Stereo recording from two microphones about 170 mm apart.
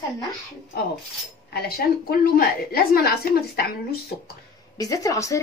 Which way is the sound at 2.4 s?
65° left (ahead or behind).